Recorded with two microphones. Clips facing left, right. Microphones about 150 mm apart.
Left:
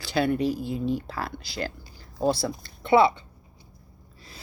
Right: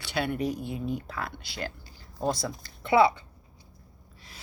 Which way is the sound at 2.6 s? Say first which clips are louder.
Left 2 dB; 25° left (ahead or behind).